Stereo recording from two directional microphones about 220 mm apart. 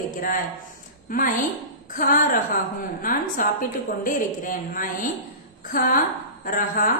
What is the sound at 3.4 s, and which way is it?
A man's voice, 40° left (ahead or behind).